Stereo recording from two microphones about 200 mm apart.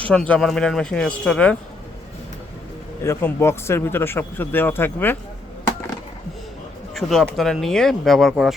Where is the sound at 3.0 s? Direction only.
15° left (ahead or behind).